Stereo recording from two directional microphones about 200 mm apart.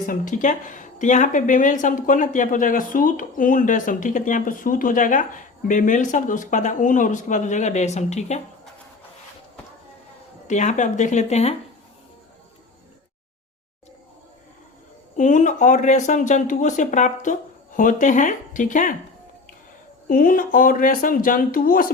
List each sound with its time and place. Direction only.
0.1 s speech: 40° left (ahead or behind)
10.4 s speech: 35° left (ahead or behind)
15.1 s speech: 40° left (ahead or behind)
20.1 s speech: 45° left (ahead or behind)